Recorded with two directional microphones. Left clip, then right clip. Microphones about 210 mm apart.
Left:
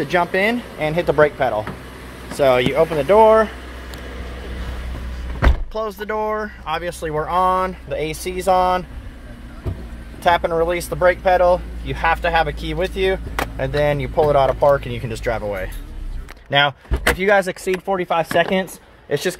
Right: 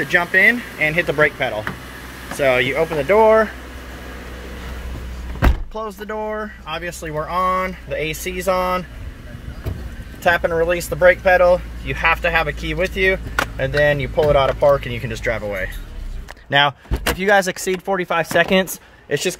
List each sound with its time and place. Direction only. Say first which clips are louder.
0.0 s speech: right 4 dB; 10° left (ahead or behind)
5.7 s speech: left 3 dB; 5° right (ahead or behind)
10.2 s speech: even; centre (ahead or behind)
16.4 s speech: right 1 dB; 10° right (ahead or behind)